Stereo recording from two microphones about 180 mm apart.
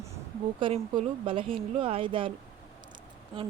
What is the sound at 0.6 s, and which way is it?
Speech, 30° right (ahead or behind).